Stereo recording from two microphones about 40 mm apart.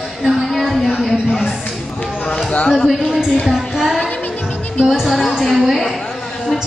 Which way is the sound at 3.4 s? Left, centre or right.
Centre.